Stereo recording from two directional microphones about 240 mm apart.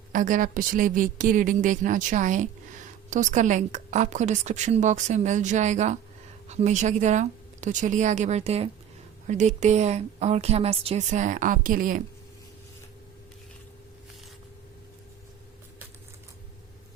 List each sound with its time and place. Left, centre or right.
0.1 s a woman's voice: right